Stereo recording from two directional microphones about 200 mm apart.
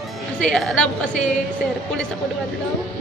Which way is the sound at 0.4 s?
5° left (ahead or behind).